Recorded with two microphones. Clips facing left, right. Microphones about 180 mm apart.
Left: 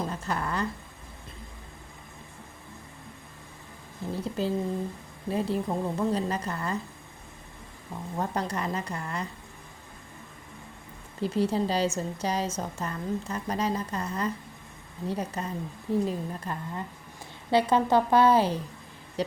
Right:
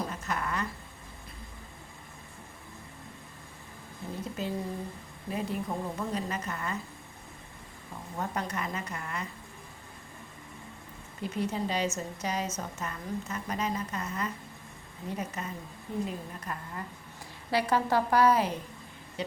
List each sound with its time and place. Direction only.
0.1 s a sound: 30° left (ahead or behind)
4.1 s a woman's voice: 30° left (ahead or behind)
8.2 s a woman's voice: 30° left (ahead or behind)
11.2 s a woman's voice: 30° left (ahead or behind)